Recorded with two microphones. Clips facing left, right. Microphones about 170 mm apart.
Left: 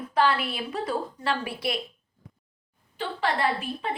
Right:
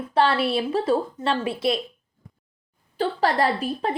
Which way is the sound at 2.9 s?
35° right (ahead or behind).